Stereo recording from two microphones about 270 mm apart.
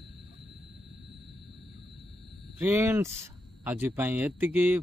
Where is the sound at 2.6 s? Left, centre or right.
Centre.